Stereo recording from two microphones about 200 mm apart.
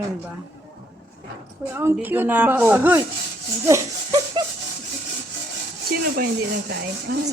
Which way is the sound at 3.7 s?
15° right (ahead or behind).